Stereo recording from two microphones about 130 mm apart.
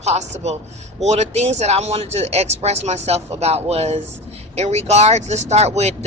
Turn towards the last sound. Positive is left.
turn(degrees=-55)  # may be behind; listen again after turning